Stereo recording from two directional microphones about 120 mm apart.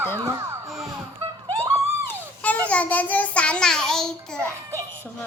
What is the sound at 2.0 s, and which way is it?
A child's voice, 10° left (ahead or behind).